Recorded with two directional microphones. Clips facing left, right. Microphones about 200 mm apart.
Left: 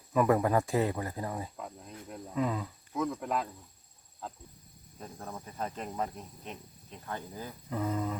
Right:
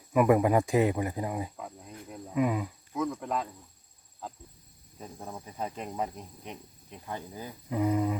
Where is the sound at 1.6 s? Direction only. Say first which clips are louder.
Right 1 dB; centre (ahead or behind).